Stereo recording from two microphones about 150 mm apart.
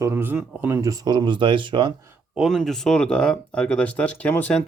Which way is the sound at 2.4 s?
Centre (ahead or behind).